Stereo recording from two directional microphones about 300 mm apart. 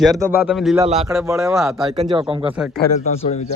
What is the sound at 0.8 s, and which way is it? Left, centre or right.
Speech, centre.